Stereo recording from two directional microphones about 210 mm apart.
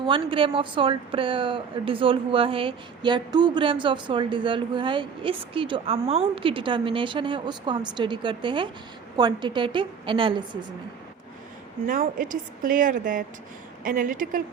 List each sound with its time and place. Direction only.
0.0 s speech: 25° right (ahead or behind)
11.9 s a woman's voice: 40° right (ahead or behind)